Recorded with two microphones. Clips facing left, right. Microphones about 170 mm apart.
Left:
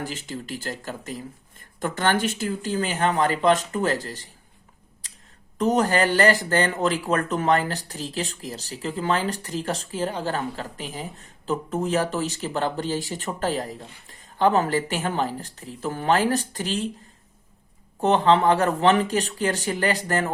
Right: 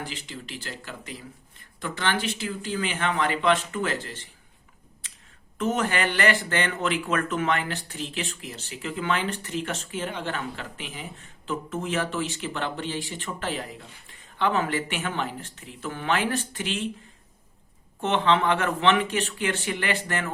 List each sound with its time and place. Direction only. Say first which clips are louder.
0.0 s speech: left 5 dB; 45° left (ahead or behind)
5.5 s speech: left 5 dB; 40° left (ahead or behind)
18.0 s speech: left 5 dB; 40° left (ahead or behind)